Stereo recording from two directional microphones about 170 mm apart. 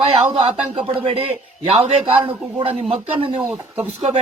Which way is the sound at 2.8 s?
35° right (ahead or behind).